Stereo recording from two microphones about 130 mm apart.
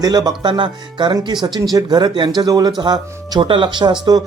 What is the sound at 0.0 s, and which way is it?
Speech, 30° right (ahead or behind).